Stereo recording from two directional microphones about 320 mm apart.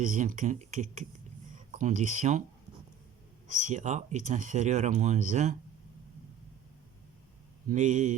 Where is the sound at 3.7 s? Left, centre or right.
Right.